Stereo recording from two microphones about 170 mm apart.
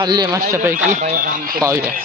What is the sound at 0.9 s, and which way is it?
Speech, 45° right (ahead or behind).